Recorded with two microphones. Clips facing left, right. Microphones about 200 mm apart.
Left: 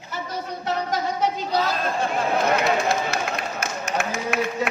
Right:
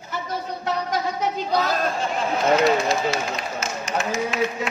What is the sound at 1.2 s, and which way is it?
Speech, 50° right (ahead or behind).